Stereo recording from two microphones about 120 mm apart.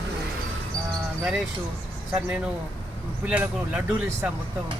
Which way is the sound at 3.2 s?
10° right (ahead or behind).